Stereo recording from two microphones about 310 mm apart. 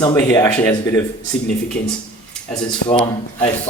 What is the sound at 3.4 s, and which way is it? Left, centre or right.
Speech, centre.